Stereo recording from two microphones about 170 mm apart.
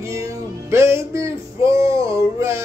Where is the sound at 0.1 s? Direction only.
15° right (ahead or behind).